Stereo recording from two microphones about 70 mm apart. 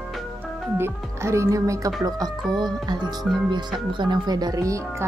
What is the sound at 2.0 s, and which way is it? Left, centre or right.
Speech, right.